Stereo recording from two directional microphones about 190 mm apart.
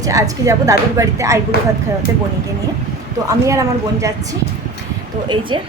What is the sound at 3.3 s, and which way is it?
Speech, 15° right (ahead or behind).